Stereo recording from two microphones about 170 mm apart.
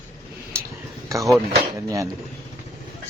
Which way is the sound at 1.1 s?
20° right (ahead or behind).